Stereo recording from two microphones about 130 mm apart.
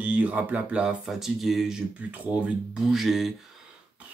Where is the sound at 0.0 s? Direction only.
10° right (ahead or behind).